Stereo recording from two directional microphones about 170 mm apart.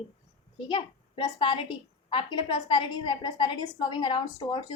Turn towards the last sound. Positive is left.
turn(degrees=25)  # may be behind; listen again after turning